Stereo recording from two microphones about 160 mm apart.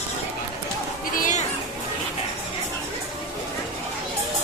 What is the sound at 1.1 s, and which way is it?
Music, 55° left (ahead or behind).